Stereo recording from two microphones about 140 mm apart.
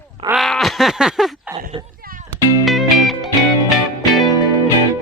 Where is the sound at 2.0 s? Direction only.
90° right.